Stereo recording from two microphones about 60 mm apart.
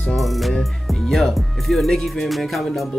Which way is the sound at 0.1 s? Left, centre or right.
Centre.